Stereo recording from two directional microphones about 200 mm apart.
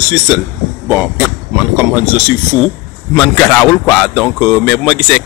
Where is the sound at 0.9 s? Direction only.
5° right (ahead or behind).